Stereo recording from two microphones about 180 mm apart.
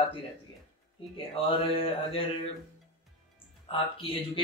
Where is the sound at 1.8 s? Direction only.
30° left (ahead or behind).